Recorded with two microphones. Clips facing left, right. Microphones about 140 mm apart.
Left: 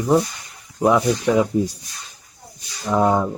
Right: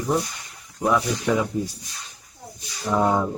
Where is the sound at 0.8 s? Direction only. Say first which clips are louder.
Left 5 dB; 25° left (ahead or behind).